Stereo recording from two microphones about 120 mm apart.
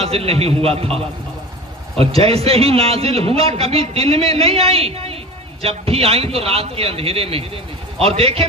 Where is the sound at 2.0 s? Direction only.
55° right (ahead or behind).